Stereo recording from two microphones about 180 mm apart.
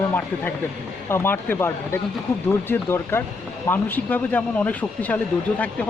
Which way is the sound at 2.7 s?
10° left (ahead or behind).